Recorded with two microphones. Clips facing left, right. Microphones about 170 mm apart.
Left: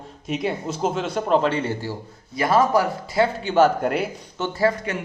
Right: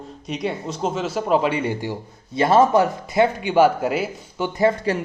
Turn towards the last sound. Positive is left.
turn(degrees=-30)  # may be behind; listen again after turning